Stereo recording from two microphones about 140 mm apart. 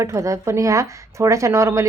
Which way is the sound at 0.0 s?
20° right (ahead or behind).